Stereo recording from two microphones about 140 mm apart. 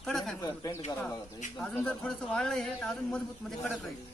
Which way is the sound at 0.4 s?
25° left (ahead or behind).